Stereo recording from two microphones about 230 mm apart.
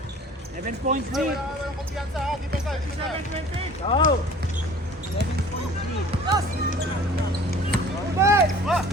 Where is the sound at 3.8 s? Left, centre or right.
Left.